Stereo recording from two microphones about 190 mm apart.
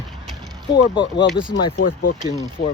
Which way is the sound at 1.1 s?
70° left (ahead or behind).